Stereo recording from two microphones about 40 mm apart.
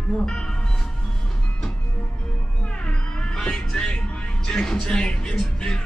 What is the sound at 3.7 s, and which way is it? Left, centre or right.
Music, left.